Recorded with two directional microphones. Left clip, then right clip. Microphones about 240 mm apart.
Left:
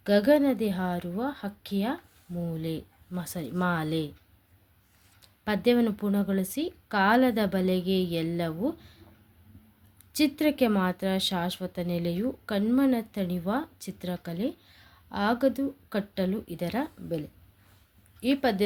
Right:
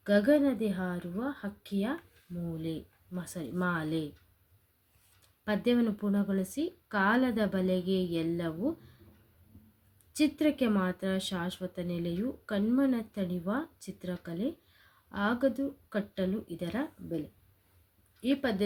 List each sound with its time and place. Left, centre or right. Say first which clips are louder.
0.0 s speech: left 4 dB; left
5.5 s speech: left 5 dB; left
10.1 s speech: left 3 dB; left
18.2 s speech: left 5 dB; left